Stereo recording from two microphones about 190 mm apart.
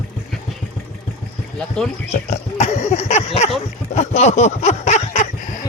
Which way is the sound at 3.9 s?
35° left (ahead or behind).